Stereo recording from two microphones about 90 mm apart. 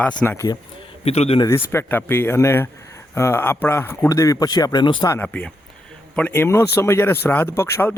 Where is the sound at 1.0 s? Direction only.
90° left.